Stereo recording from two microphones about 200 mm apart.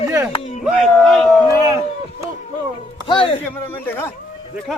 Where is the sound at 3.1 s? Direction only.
25° left (ahead or behind).